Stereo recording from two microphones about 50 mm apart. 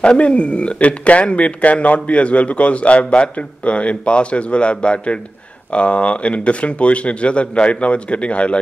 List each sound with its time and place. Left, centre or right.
0.0 s speech: left